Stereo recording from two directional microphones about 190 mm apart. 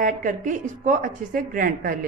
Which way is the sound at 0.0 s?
40° right (ahead or behind).